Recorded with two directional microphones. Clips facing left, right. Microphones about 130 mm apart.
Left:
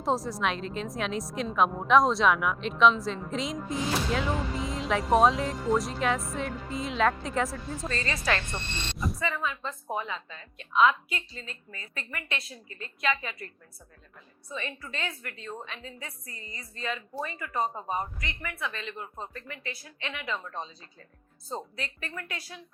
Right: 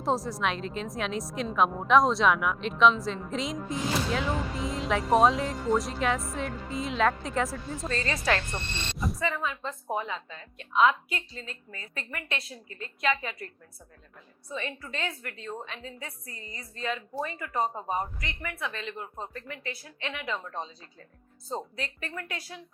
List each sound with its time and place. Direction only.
0.0 s a woman's voice: centre (ahead or behind)
7.9 s a woman's voice: 25° right (ahead or behind)
8.5 s a woman's voice: centre (ahead or behind)
9.2 s a woman's voice: 45° right (ahead or behind)
14.5 s a woman's voice: 45° right (ahead or behind)
21.8 s a woman's voice: 40° right (ahead or behind)